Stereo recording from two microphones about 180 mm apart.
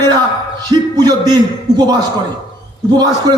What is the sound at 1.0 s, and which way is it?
A man's voice, 25° right (ahead or behind).